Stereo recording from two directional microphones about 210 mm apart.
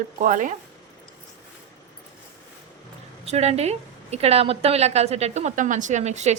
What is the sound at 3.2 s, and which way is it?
A woman's voice, 30° right (ahead or behind).